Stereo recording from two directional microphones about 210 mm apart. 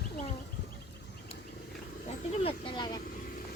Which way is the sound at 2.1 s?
25° left (ahead or behind).